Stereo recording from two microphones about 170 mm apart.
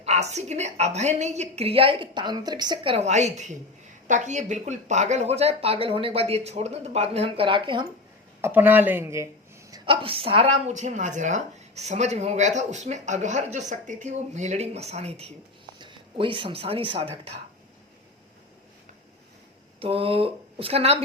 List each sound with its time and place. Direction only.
0.0 s speech: 40° right (ahead or behind)
8.4 s speech: 15° right (ahead or behind)
9.6 s a woman's voice: 25° right (ahead or behind)
15.8 s speech: 30° right (ahead or behind)
19.8 s speech: 35° right (ahead or behind)